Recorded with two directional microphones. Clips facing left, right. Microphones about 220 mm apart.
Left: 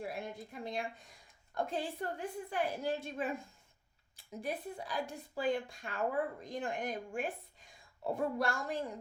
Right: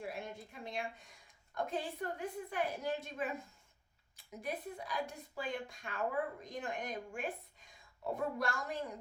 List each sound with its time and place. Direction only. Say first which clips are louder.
0.1 s a woman's voice: left 2 dB; 35° left (ahead or behind)